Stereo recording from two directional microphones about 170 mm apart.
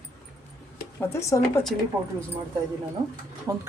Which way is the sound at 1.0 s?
15° left (ahead or behind).